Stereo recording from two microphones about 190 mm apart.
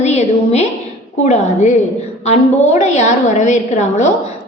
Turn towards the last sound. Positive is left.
turn(degrees=40)  # may be behind; listen again after turning